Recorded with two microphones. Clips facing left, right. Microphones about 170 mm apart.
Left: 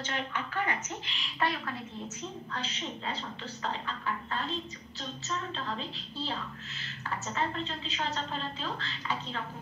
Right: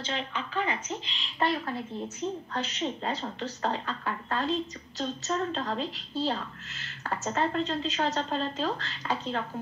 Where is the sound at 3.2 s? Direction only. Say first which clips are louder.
Right 6 dB; 45° right (ahead or behind).